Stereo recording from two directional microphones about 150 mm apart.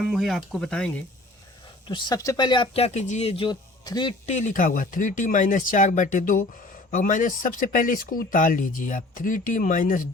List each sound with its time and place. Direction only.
0.0 s speech: centre (ahead or behind)
1.9 s speech: 30° left (ahead or behind)
4.3 s speech: 55° left (ahead or behind)